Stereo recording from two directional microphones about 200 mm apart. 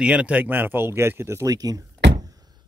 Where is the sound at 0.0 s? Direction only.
5° right (ahead or behind).